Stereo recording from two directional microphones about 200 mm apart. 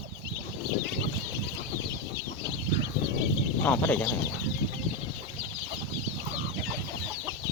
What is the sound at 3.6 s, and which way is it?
Speech, 10° left (ahead or behind).